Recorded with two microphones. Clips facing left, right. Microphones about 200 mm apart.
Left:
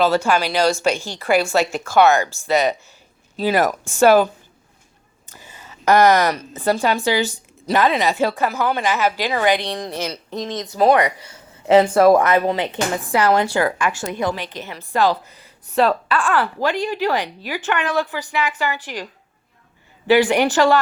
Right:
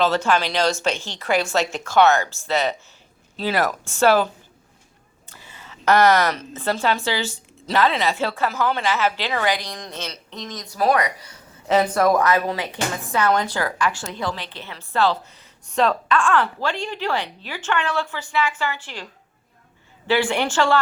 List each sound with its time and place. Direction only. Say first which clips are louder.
0.0 s a woman's voice: left 2 dB; 10° left (ahead or behind)
5.4 s a sound: left 2 dB; 40° left (ahead or behind)
5.6 s a woman's voice: left 2 dB; 15° left (ahead or behind)
9.6 s speech: left 8 dB; 30° left (ahead or behind)
10.1 s a woman's voice: left 8 dB; 40° left (ahead or behind); by 19.0 s 15° left (ahead or behind)
20.3 s a woman's voice: left 5 dB; 15° left (ahead or behind)